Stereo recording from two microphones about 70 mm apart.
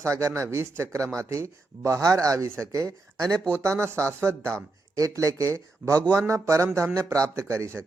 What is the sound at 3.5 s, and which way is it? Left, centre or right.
Speech, right.